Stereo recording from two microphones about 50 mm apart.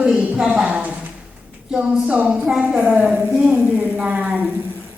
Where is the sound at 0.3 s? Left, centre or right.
Right.